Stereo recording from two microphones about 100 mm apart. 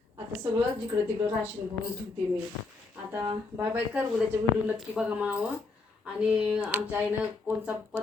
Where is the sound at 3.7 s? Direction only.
10° right (ahead or behind).